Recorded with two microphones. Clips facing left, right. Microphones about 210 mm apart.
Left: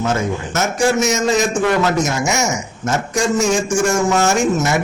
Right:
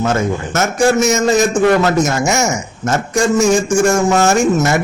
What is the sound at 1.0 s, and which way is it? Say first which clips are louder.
A man's voice: right 4 dB; 50° right (ahead or behind).